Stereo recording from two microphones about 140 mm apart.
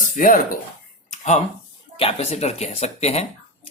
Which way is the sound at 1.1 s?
55° left (ahead or behind).